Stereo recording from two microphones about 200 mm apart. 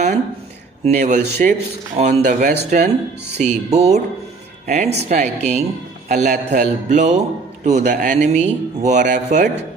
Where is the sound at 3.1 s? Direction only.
55° right (ahead or behind).